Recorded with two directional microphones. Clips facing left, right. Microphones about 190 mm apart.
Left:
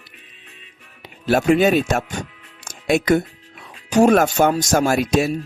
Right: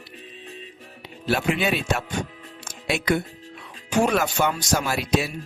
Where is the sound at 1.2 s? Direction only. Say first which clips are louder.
Left 8 dB; 45° left (ahead or behind).